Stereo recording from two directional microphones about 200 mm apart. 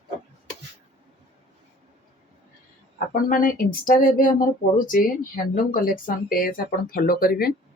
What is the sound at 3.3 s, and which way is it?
Speech, 45° left (ahead or behind).